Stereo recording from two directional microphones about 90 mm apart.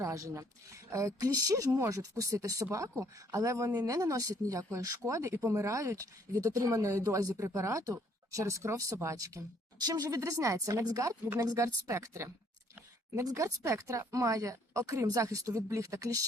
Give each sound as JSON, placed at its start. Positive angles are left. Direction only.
{"t": 0.0, "sound": "speech", "side_deg": -35}